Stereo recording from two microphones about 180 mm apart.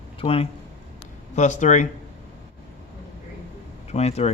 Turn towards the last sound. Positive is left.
turn(degrees=35)  # may be behind; listen again after turning